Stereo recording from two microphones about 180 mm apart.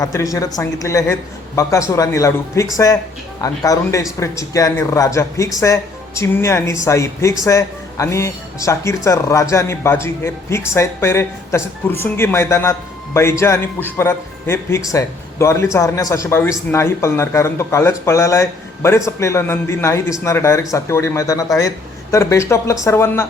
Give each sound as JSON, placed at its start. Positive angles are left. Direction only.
{"t": 0.0, "sound": "a man's voice", "side_deg": 20}